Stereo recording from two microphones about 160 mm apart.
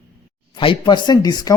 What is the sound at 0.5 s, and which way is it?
Speech, 30° left (ahead or behind).